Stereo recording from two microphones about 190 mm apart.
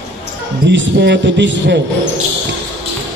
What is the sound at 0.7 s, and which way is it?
A man's voice, 65° right (ahead or behind).